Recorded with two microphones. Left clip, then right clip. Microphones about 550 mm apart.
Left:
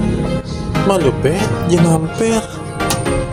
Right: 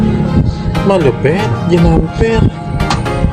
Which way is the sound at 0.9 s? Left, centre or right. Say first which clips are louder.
Right 4 dB; left.